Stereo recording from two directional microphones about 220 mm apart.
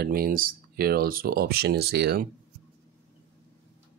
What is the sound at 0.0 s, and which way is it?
Speech, 45° right (ahead or behind).